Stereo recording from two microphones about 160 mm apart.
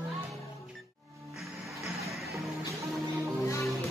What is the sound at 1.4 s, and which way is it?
Music, centre (ahead or behind).